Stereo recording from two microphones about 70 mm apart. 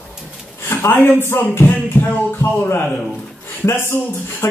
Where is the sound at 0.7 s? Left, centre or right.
Left.